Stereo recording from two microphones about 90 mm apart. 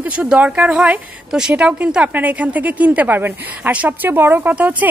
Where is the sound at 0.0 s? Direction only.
15° right (ahead or behind).